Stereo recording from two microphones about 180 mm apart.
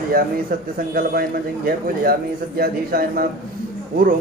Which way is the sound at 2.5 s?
55° right (ahead or behind).